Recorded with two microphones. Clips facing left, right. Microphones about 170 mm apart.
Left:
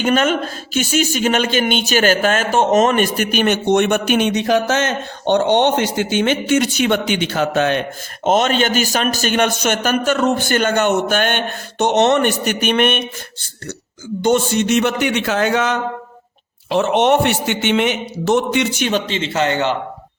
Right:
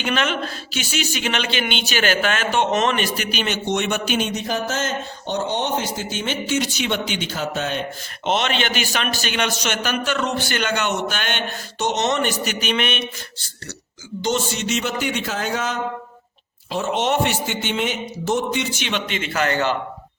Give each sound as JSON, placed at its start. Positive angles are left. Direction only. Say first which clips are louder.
{"t": 0.0, "sound": "speech", "louder": "left 7 dB", "side_deg": 45}
{"t": 8.2, "sound": "a man's voice", "louder": "left 6 dB", "side_deg": 45}
{"t": 14.2, "sound": "speech", "louder": "left 7 dB", "side_deg": 55}
{"t": 18.9, "sound": "speech", "louder": "left 6 dB", "side_deg": 35}